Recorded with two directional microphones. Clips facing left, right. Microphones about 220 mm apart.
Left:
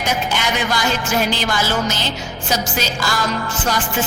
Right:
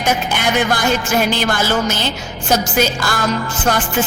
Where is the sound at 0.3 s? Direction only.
55° right (ahead or behind).